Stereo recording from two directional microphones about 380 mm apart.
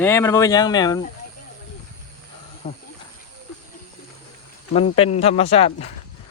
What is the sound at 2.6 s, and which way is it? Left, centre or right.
Speech, left.